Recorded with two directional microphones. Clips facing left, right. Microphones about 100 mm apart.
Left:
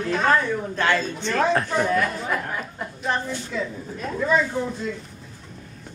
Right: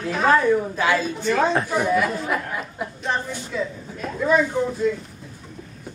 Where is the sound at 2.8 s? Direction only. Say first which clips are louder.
Even; centre (ahead or behind).